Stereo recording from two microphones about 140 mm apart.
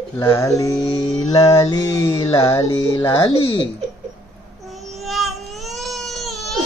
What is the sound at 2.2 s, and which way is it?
Music, 40° left (ahead or behind).